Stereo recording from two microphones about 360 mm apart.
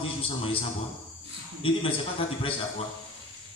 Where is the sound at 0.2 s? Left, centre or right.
Centre.